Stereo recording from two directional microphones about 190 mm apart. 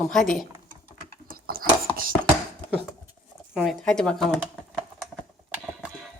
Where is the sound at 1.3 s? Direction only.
50° right (ahead or behind).